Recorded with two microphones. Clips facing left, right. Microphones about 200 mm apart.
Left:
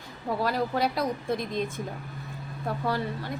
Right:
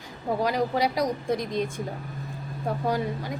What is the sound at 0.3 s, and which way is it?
A woman's voice, 15° right (ahead or behind).